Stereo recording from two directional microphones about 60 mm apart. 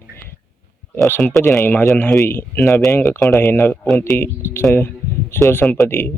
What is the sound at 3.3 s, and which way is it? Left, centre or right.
Speech, left.